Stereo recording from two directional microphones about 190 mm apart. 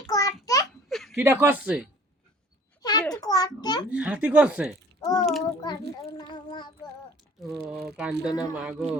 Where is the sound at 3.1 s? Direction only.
20° left (ahead or behind).